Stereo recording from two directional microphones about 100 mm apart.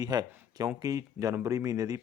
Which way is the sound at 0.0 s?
40° right (ahead or behind).